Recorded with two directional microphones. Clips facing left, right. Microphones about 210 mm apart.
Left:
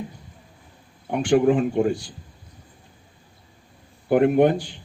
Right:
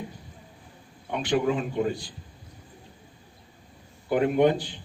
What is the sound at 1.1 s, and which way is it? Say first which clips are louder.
Speech: left 7 dB; 50° left (ahead or behind).